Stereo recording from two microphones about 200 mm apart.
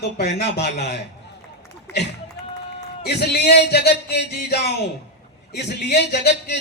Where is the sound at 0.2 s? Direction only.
55° left (ahead or behind).